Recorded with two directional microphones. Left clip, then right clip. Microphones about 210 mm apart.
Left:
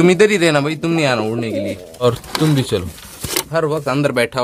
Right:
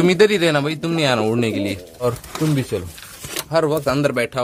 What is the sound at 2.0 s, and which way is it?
Speech, 5° left (ahead or behind).